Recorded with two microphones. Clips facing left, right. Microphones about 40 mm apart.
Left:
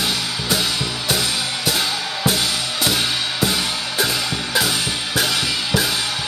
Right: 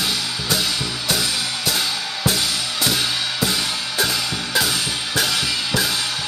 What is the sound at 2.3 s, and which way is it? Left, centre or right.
Drum kit, left.